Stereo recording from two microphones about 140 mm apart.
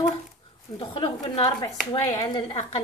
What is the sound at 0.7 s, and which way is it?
Speech, 40° left (ahead or behind).